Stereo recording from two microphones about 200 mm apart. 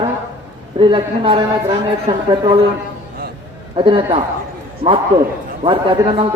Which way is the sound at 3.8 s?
25° right (ahead or behind).